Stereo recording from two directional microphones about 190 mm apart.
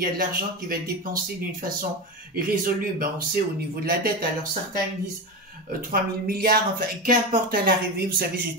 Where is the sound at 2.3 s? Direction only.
50° right (ahead or behind).